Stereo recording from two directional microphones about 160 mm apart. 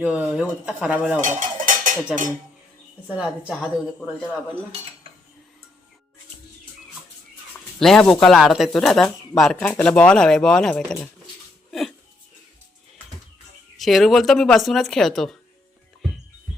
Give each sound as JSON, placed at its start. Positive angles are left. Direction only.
{"t": 0.0, "sound": "speech", "side_deg": -5}
{"t": 1.2, "sound": "cutlery", "side_deg": -55}
{"t": 3.2, "sound": "speech", "side_deg": -5}
{"t": 7.8, "sound": "speech", "side_deg": 5}
{"t": 11.7, "sound": "a sound", "side_deg": 0}
{"t": 13.7, "sound": "speech", "side_deg": 0}